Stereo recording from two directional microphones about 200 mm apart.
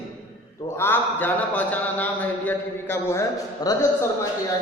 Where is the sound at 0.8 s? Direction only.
10° left (ahead or behind).